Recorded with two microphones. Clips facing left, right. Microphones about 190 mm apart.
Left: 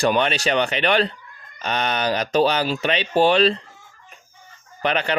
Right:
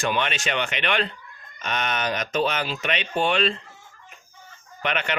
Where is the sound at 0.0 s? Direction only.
35° left (ahead or behind).